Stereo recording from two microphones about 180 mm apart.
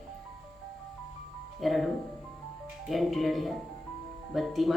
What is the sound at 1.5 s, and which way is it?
Speech, centre (ahead or behind).